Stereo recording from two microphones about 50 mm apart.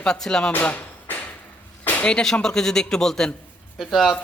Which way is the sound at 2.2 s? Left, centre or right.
Centre.